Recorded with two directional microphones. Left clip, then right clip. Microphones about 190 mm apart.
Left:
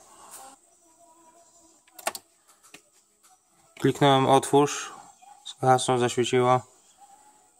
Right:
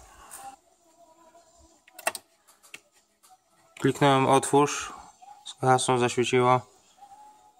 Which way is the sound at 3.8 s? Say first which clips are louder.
Left 1 dB; 5° left (ahead or behind).